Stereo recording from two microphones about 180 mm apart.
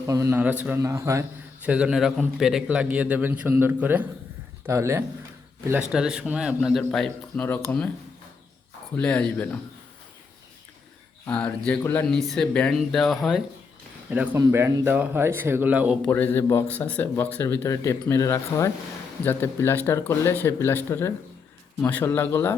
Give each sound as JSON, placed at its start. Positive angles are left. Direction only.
{"t": 0.1, "sound": "a man's voice", "side_deg": -15}
{"t": 1.6, "sound": "a man's voice", "side_deg": -5}
{"t": 5.9, "sound": "a man's voice", "side_deg": -5}
{"t": 9.0, "sound": "speech", "side_deg": 5}
{"t": 11.3, "sound": "a man's voice", "side_deg": 5}
{"t": 14.1, "sound": "a man's voice", "side_deg": -10}
{"t": 16.0, "sound": "speech", "side_deg": 10}